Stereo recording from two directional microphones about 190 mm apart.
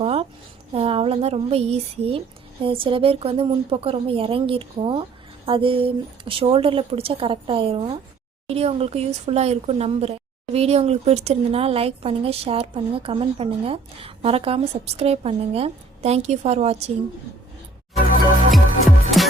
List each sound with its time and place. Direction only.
0.0 s a sound: 30° right (ahead or behind)
0.7 s speech: 30° right (ahead or behind)
18.5 s music: centre (ahead or behind)